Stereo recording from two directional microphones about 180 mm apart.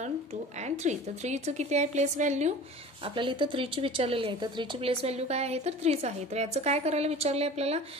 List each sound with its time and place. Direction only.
0.6 s a woman's voice: 40° right (ahead or behind)
3.2 s a woman's voice: 25° right (ahead or behind)